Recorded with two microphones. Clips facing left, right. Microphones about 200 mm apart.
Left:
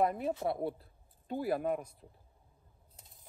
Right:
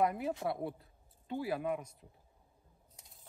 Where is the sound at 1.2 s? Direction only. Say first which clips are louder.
Left 3 dB; 50° left (ahead or behind).